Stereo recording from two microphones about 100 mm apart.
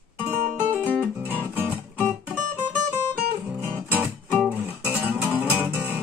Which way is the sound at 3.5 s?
15° right (ahead or behind).